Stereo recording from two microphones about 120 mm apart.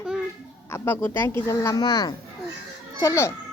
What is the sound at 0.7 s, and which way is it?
A child's voice, 20° left (ahead or behind).